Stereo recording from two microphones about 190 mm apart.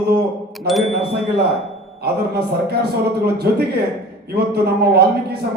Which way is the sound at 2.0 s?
60° right (ahead or behind).